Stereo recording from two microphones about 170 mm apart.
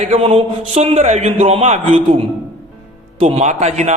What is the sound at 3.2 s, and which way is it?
Speech, 35° right (ahead or behind).